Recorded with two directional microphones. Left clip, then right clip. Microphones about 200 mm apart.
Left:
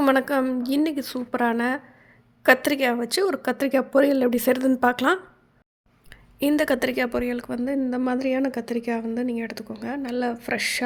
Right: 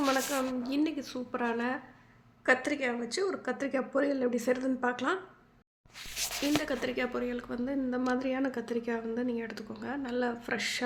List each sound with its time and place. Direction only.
0.0 s speech: 45° left (ahead or behind)
6.4 s a woman's voice: 45° left (ahead or behind)